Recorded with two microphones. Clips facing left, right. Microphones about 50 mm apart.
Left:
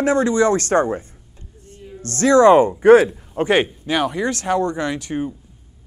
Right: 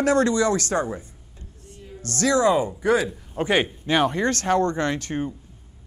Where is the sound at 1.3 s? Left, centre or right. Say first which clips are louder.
Left 2 dB; left.